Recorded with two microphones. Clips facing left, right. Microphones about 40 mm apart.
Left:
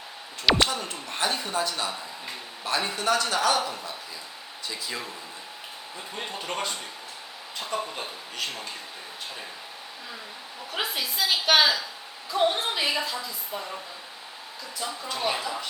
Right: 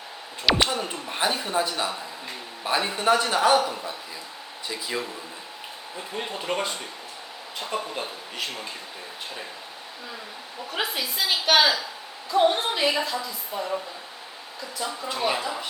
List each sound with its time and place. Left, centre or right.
0.7 s speech: centre
7.9 s speech: centre
10.7 s a woman's voice: centre
14.8 s speech: centre